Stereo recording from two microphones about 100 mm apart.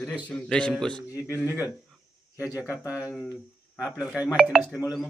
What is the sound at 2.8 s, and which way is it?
A man's voice, 10° right (ahead or behind).